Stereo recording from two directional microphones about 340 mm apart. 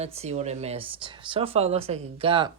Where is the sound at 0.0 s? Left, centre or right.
Centre.